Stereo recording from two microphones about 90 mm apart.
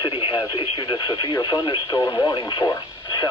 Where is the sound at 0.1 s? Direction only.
80° left.